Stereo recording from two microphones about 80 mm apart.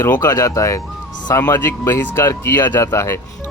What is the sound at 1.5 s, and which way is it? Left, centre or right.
Speech, left.